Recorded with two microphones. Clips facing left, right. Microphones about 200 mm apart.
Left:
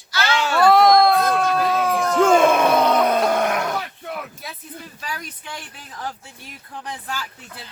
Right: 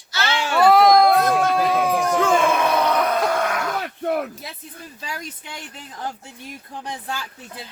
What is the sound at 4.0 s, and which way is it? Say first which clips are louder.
Speech: right 9 dB; 50° right (ahead or behind).